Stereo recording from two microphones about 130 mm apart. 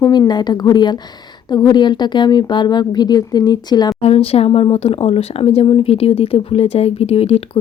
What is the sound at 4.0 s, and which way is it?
Speech, 50° left (ahead or behind).